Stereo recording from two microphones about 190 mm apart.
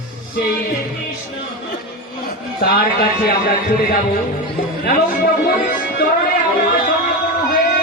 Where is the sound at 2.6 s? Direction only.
50° left (ahead or behind).